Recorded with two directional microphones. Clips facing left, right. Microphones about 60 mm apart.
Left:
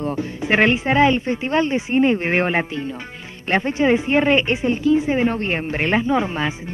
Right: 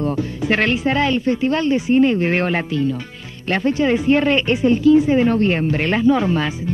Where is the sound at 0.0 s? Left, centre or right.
Left.